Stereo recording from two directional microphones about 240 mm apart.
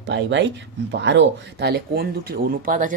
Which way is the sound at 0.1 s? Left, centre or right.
Right.